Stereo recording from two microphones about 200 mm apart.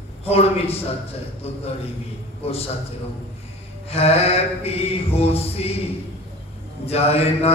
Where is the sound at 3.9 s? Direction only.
30° left (ahead or behind).